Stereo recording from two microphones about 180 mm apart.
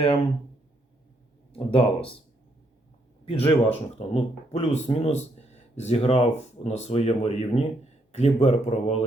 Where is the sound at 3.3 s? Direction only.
30° left (ahead or behind).